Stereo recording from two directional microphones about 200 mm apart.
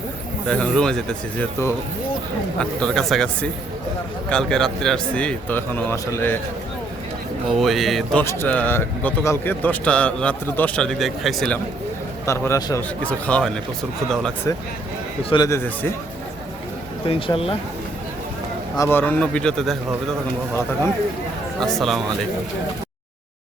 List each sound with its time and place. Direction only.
0.4 s a man's voice: 5° left (ahead or behind)
7.6 s a man's voice: centre (ahead or behind)
8.2 s a man's voice: 10° left (ahead or behind)
12.2 s a man's voice: 15° left (ahead or behind)
15.2 s speech: 25° left (ahead or behind)
15.4 s a man's voice: 10° left (ahead or behind)
17.1 s speech: 25° left (ahead or behind)
18.8 s a man's voice: 10° left (ahead or behind)
21.6 s a man's voice: centre (ahead or behind)